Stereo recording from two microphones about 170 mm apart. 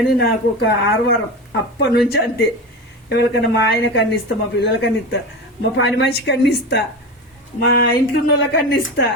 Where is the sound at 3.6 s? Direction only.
80° left.